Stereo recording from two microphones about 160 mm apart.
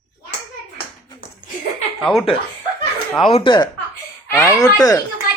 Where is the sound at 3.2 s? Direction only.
35° left (ahead or behind).